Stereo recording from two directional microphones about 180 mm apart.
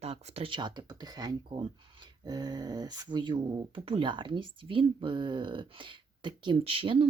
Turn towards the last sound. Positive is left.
turn(degrees=-30)  # may be behind; listen again after turning